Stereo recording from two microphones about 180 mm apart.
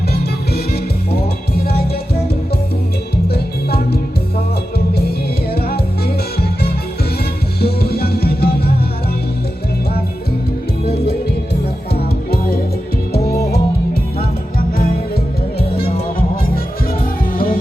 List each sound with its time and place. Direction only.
0.1 s music: 60° left (ahead or behind)
3.2 s music: 60° left (ahead or behind)
5.5 s music: 60° left (ahead or behind)
7.6 s music: 60° left (ahead or behind)
10.8 s music: 60° left (ahead or behind)
15.7 s music: 55° left (ahead or behind)